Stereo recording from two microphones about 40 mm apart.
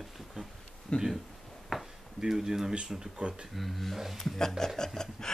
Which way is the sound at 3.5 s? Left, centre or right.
Centre.